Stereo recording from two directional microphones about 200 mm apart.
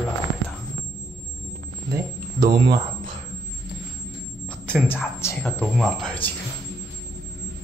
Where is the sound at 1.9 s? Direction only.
20° right (ahead or behind).